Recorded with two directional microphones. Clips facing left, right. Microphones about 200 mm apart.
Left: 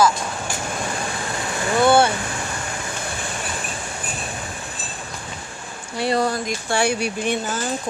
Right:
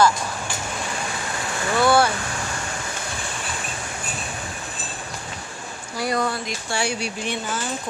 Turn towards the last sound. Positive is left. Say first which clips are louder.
# left 4 dB
turn(degrees=45)  # may be behind; listen again after turning